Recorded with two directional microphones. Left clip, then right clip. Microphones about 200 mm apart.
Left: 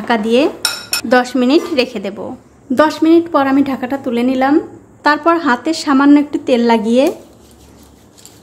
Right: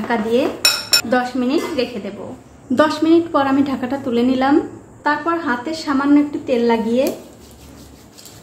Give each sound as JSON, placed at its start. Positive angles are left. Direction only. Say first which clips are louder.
{"t": 0.1, "sound": "a woman's voice", "louder": "left 5 dB", "side_deg": 50}
{"t": 2.7, "sound": "a woman's voice", "louder": "left 3 dB", "side_deg": 25}
{"t": 5.0, "sound": "a woman's voice", "louder": "left 6 dB", "side_deg": 55}